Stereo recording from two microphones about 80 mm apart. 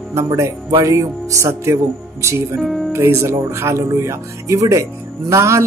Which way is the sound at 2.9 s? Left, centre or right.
Right.